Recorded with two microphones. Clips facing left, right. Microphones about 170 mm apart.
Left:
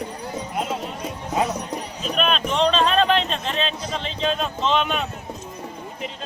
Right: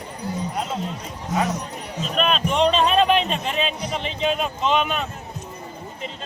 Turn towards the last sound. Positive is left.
turn(degrees=-5)  # may be behind; listen again after turning